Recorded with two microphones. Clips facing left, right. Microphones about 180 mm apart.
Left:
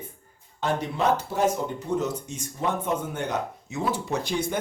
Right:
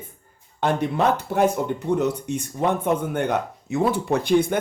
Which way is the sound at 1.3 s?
60° right (ahead or behind).